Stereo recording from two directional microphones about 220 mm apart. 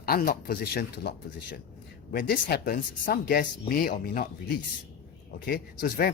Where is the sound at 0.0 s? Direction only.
40° left (ahead or behind).